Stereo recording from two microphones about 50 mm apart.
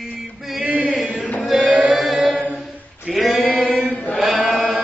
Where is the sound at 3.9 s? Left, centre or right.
Left.